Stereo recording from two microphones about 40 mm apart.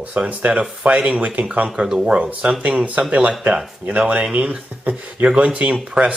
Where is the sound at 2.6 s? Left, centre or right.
Right.